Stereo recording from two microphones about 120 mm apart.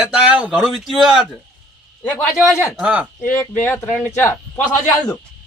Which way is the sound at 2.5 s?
25° left (ahead or behind).